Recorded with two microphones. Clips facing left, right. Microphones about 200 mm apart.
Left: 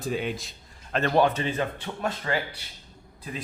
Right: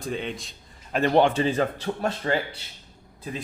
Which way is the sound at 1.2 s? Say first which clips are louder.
Right 3 dB; 30° right (ahead or behind).